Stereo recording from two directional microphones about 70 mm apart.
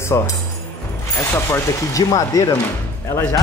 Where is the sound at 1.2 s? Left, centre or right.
Left.